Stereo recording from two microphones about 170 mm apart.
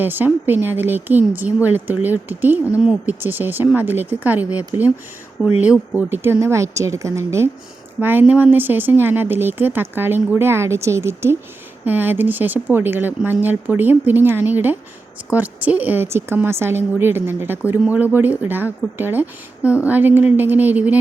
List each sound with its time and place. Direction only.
0.0 s speech: 10° right (ahead or behind)